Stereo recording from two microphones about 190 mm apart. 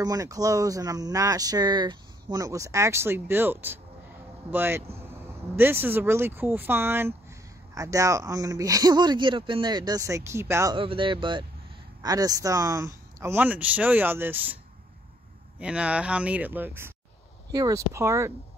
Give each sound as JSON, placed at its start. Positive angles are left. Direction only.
{"t": 0.0, "sound": "speech", "side_deg": -20}
{"t": 10.8, "sound": "speech", "side_deg": -25}
{"t": 15.6, "sound": "speech", "side_deg": -5}